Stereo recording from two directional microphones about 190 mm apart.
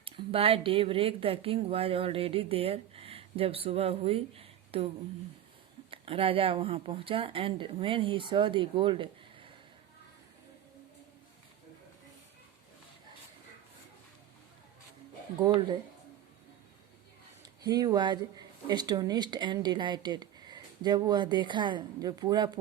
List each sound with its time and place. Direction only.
0.0 s speech: 30° right (ahead or behind)
5.9 s speech: 30° right (ahead or behind)
15.4 s speech: 25° right (ahead or behind)
17.4 s speech: 20° right (ahead or behind)